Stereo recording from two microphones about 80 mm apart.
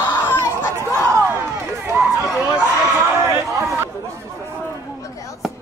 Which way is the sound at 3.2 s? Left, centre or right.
Right.